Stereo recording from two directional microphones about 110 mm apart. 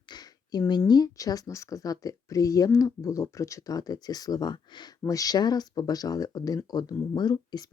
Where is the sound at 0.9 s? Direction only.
35° left (ahead or behind).